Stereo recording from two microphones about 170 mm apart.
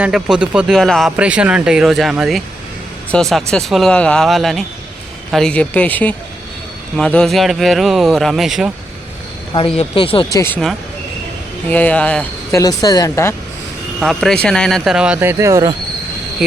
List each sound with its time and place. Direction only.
0.0 s speech: 5° right (ahead or behind)
9.5 s speech: 30° left (ahead or behind)
10.3 s speech: 15° left (ahead or behind)
11.7 s speech: 10° left (ahead or behind)
12.5 s speech: 20° left (ahead or behind)
14.0 s speech: centre (ahead or behind); by 15.7 s 20° right (ahead or behind)